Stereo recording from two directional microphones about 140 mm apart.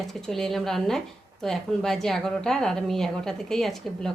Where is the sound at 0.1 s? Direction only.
5° left (ahead or behind).